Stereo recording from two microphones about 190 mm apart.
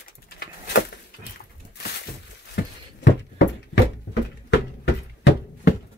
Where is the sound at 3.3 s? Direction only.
65° left (ahead or behind).